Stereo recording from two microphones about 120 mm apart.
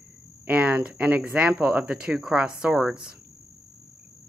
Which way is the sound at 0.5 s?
10° right (ahead or behind).